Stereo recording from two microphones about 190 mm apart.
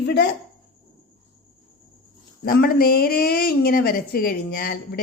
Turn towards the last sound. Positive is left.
turn(degrees=55)  # may be behind; listen again after turning